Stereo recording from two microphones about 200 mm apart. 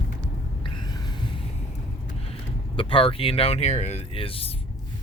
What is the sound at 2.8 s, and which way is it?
Speech, 25° left (ahead or behind).